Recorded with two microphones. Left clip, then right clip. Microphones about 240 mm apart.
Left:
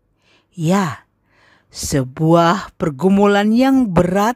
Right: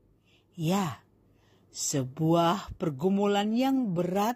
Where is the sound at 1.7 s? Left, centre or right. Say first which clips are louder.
Left 11 dB; left.